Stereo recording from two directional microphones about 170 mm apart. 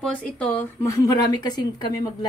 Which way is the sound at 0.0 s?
5° left (ahead or behind).